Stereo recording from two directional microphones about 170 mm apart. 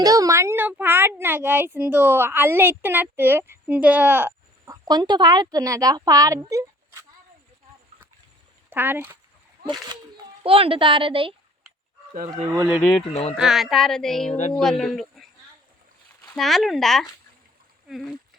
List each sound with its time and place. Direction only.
0.0 s speech: 20° right (ahead or behind)
8.7 s speech: 10° right (ahead or behind)
10.4 s speech: 35° right (ahead or behind)
12.1 s speech: 45° right (ahead or behind)
12.5 s speech: 10° right (ahead or behind)
16.3 s speech: centre (ahead or behind)